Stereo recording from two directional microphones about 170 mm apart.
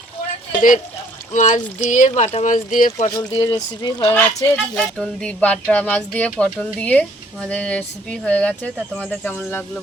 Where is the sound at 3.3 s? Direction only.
30° left (ahead or behind).